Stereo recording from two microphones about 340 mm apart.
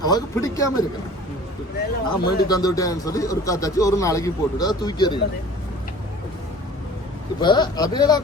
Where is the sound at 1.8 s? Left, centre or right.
Left.